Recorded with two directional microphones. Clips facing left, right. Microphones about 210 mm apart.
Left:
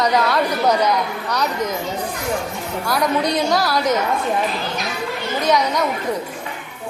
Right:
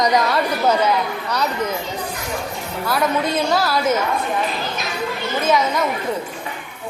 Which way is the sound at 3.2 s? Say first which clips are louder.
Left 1 dB; 20° left (ahead or behind).